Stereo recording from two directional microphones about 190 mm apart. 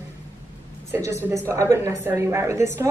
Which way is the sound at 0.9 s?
15° right (ahead or behind).